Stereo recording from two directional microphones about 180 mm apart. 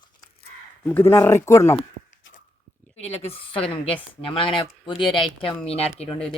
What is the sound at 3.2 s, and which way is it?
Speech, 30° left (ahead or behind).